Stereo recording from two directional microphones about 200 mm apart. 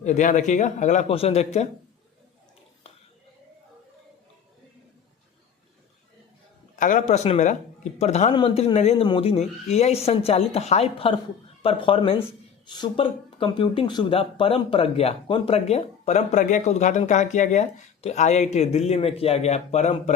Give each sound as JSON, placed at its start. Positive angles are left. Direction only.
{"t": 0.0, "sound": "speech", "side_deg": 35}
{"t": 6.7, "sound": "speech", "side_deg": 40}